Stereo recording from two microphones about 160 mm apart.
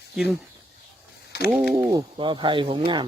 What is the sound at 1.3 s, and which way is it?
Mechanisms, 90° left.